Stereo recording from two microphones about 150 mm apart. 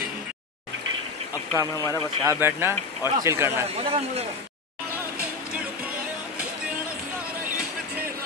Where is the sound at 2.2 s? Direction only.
15° right (ahead or behind).